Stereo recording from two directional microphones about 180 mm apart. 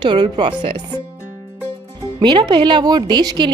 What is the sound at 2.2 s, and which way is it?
A woman's voice, 25° right (ahead or behind).